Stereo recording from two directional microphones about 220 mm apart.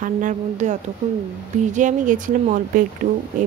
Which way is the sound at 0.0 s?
35° right (ahead or behind).